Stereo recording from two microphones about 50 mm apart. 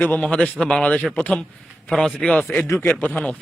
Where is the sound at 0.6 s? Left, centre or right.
Centre.